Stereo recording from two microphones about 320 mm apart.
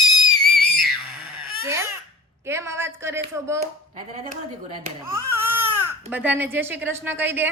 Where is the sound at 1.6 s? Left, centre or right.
Centre.